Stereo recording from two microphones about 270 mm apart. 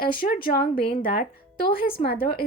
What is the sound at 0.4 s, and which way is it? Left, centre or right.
A woman's voice, left.